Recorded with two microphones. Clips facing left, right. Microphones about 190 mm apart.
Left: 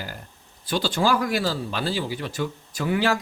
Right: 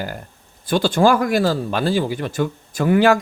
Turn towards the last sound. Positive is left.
turn(degrees=-50)  # may be behind; listen again after turning